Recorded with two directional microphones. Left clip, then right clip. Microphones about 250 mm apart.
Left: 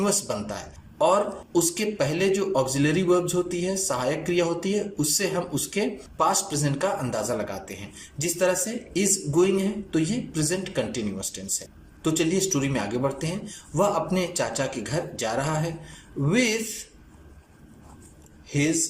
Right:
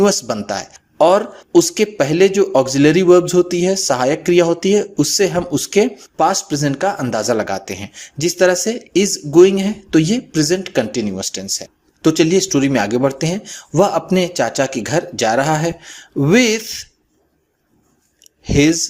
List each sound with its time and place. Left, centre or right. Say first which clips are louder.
0.0 s speech: right 11 dB; right
18.4 s speech: right 11 dB; right